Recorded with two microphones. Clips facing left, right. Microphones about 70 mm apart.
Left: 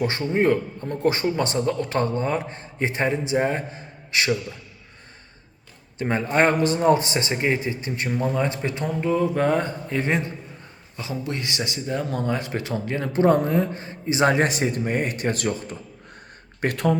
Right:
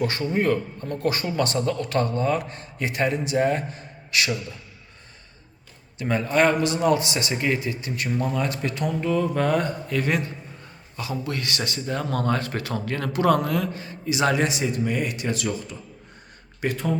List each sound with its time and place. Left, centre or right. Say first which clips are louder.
0.0 s speech: left 2 dB; left
6.0 s speech: even; left
16.6 s speech: left 3 dB; left